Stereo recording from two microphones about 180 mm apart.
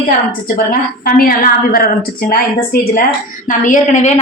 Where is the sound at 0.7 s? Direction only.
55° left (ahead or behind).